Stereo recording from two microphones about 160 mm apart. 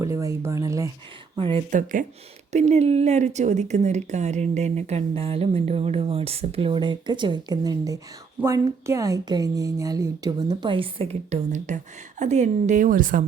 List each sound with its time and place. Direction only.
0.0 s speech: 20° right (ahead or behind)
1.4 s speech: 30° right (ahead or behind)
1.7 s a woman's voice: 55° right (ahead or behind)